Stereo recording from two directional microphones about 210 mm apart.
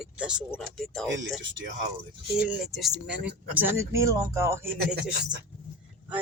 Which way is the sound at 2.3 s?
5° right (ahead or behind).